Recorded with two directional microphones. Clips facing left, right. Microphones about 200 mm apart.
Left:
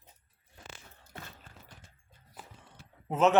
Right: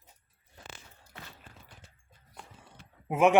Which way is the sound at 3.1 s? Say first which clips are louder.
Right 2 dB; 10° right (ahead or behind).